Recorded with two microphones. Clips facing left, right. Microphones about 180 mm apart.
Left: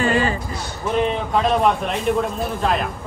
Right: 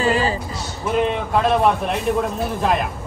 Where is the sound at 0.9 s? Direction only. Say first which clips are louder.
Right 1 dB; 5° right (ahead or behind).